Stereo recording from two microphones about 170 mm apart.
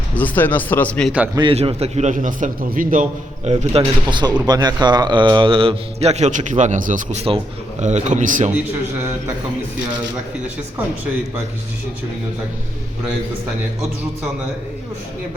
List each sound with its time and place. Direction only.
0.2 s speech: 10° left (ahead or behind)
1.4 s a man's voice: 30° right (ahead or behind); by 3.5 s 50° right (ahead or behind)
3.8 s a man's voice: 25° right (ahead or behind); by 8.4 s 50° right (ahead or behind)